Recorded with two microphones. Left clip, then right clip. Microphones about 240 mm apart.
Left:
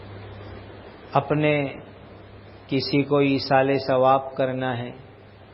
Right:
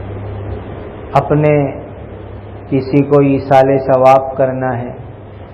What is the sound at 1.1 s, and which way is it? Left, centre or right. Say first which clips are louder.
Speech: right 10 dB; left.